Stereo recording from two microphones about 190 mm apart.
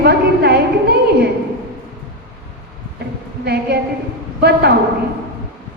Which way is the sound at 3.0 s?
55° right (ahead or behind).